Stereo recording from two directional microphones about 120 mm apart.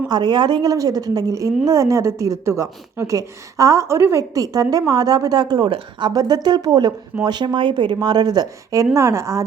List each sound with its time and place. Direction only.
0.1 s a woman's voice: 35° right (ahead or behind)